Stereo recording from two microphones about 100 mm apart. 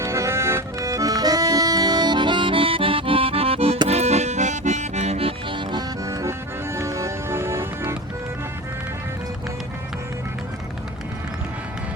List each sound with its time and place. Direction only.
0.0 s accordion: 30° right (ahead or behind); by 3.8 s 75° right (ahead or behind)
3.8 s accordion: 90° right
4.9 s music: 90° right; by 5.8 s 55° right (ahead or behind)
6.1 s music: 35° right (ahead or behind)